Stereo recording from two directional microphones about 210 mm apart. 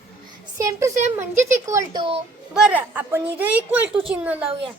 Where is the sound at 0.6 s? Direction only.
15° right (ahead or behind).